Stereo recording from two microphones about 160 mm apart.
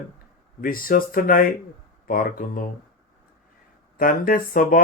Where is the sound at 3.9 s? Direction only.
60° left (ahead or behind).